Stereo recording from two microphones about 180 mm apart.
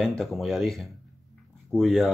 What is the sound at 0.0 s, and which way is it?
Speech, centre (ahead or behind).